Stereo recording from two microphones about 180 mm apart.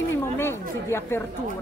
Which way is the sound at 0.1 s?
15° left (ahead or behind).